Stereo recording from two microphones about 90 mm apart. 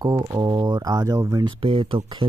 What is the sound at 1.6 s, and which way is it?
Speech, 80° right.